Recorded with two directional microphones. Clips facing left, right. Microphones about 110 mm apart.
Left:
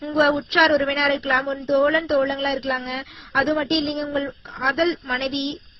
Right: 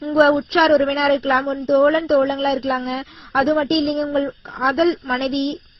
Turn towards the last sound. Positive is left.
turn(degrees=-40)  # may be behind; listen again after turning